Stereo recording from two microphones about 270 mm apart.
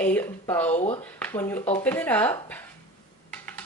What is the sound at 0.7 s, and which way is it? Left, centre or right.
Speech, left.